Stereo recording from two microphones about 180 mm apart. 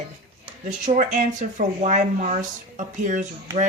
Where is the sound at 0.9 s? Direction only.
35° right (ahead or behind).